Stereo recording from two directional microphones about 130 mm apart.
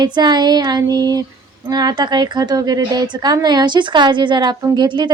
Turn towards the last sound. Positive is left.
turn(degrees=-35)  # may be behind; listen again after turning